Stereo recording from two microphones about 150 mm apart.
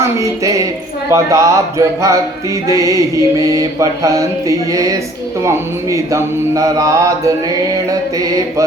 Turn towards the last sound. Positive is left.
turn(degrees=-20)  # may be behind; listen again after turning